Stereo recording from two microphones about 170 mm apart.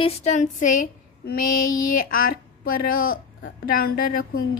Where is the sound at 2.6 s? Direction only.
60° left (ahead or behind).